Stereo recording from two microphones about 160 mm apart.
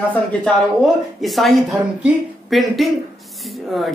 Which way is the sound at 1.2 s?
Centre (ahead or behind).